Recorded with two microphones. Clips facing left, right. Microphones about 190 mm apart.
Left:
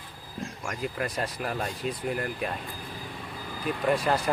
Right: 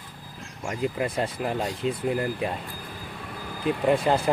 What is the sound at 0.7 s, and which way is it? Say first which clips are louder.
Speech: right 6 dB; 25° right (ahead or behind).